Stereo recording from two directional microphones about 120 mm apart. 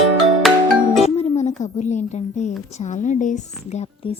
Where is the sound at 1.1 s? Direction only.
65° left (ahead or behind).